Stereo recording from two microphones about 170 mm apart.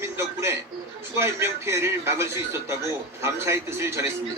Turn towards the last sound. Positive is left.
turn(degrees=-15)  # may be behind; listen again after turning